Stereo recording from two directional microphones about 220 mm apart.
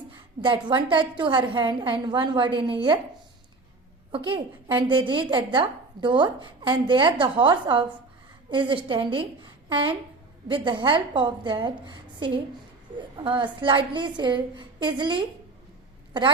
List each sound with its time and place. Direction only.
0.4 s a woman's voice: 20° right (ahead or behind)
4.1 s a woman's voice: 20° right (ahead or behind)